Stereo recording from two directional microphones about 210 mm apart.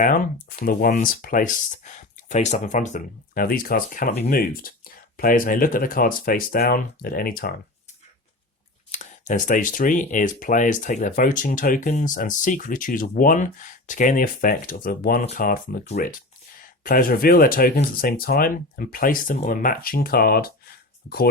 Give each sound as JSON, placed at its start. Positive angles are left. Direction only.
{"t": 0.6, "sound": "speech", "side_deg": 45}
{"t": 8.9, "sound": "speech", "side_deg": 35}